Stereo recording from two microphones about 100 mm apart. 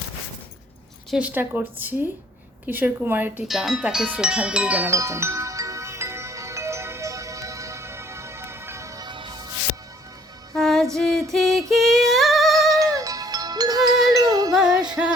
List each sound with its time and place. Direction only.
1.1 s a woman's voice: 15° right (ahead or behind)
3.4 s speech: 5° right (ahead or behind)
4.9 s music: 30° right (ahead or behind)
9.0 s music: 50° right (ahead or behind)
10.5 s music: 5° left (ahead or behind)
10.9 s singing: 5° left (ahead or behind)
12.5 s music: 35° right (ahead or behind)
14.5 s music: 10° right (ahead or behind)